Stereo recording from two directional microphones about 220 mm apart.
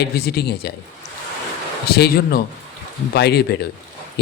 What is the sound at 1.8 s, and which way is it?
A man's voice, 45° left (ahead or behind).